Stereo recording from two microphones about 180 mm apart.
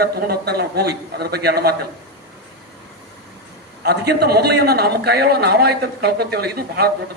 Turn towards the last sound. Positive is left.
turn(degrees=-60)  # may be behind; listen again after turning